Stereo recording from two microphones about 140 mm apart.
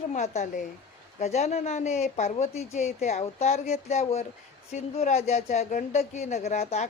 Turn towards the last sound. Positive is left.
turn(degrees=50)  # may be behind; listen again after turning